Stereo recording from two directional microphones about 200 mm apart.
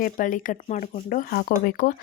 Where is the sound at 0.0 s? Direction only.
40° left (ahead or behind).